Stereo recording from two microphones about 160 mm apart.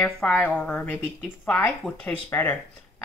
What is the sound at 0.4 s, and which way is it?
Speech, 10° left (ahead or behind).